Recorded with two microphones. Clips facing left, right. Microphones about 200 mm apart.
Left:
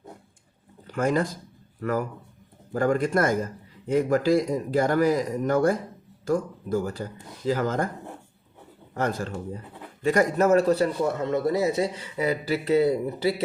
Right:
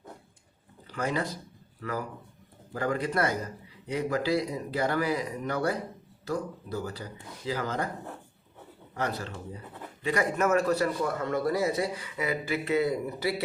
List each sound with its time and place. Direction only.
0.9 s speech: 45° left (ahead or behind)
9.0 s a man's voice: 45° left (ahead or behind); by 13.3 s 30° left (ahead or behind)